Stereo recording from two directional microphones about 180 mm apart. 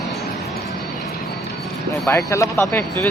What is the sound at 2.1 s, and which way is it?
Speech, 15° left (ahead or behind).